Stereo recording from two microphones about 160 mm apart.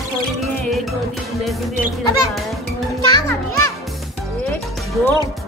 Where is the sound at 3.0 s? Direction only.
30° left (ahead or behind).